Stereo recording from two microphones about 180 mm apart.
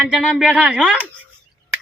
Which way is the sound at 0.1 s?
5° right (ahead or behind).